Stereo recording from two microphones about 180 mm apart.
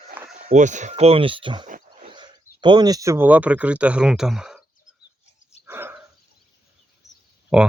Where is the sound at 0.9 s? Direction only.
30° right (ahead or behind).